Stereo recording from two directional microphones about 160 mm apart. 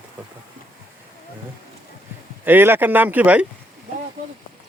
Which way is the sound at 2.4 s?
15° right (ahead or behind).